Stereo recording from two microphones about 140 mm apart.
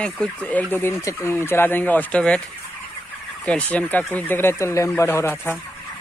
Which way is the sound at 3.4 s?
10° left (ahead or behind).